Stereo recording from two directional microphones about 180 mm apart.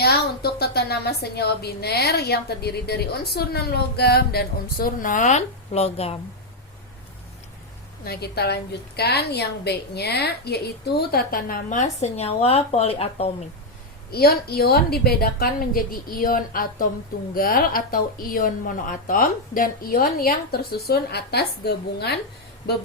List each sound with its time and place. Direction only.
0.0 s a woman's voice: 60° left (ahead or behind); by 6.1 s 35° left (ahead or behind)
8.0 s a woman's voice: 60° left (ahead or behind); by 13.3 s 35° left (ahead or behind)
14.1 s a woman's voice: 60° left (ahead or behind)